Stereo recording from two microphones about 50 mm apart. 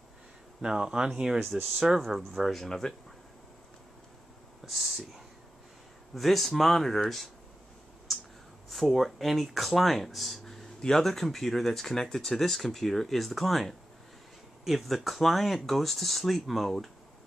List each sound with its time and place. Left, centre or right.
0.6 s speech: centre
1.5 s speech: centre
4.6 s speech: centre
8.1 s a sound: centre
8.6 s speech: centre